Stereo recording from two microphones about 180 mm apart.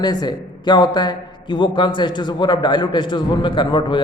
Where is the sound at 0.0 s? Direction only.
25° left (ahead or behind).